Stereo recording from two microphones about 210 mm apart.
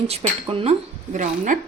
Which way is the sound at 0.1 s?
25° right (ahead or behind).